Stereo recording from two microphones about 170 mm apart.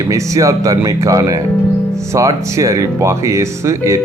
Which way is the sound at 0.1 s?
20° right (ahead or behind).